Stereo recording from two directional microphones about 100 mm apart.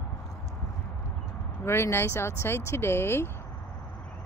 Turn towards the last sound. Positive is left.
turn(degrees=25)  # may be behind; listen again after turning